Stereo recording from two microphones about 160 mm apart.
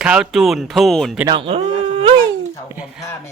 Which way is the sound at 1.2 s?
30° right (ahead or behind).